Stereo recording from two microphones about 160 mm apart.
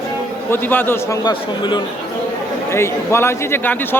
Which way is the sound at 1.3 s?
30° left (ahead or behind).